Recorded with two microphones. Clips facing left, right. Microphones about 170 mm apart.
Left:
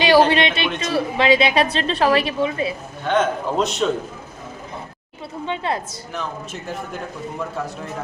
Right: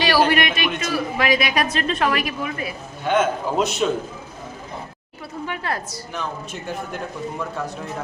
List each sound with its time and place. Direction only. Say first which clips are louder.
0.3 s a man's voice: left 1 dB; 25° left (ahead or behind)
3.1 s a man's voice: even; 5° right (ahead or behind)
5.5 s a man's voice: left 4 dB; 20° left (ahead or behind)
6.1 s a man's voice: left 1 dB; centre (ahead or behind)